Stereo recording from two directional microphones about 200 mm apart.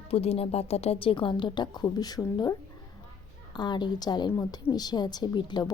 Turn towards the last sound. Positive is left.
turn(degrees=20)  # may be behind; listen again after turning